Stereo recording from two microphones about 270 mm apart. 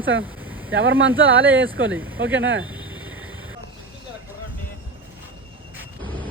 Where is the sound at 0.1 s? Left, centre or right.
Right.